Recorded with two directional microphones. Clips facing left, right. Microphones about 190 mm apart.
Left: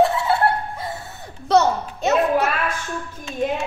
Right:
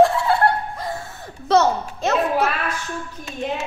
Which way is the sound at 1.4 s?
Centre (ahead or behind).